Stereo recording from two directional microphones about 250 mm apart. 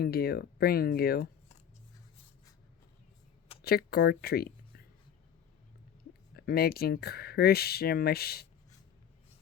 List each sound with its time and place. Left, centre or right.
0.0 s speech: left
3.6 s speech: left
6.3 s speech: left